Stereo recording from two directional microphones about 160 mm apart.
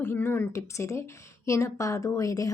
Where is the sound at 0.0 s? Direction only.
15° left (ahead or behind).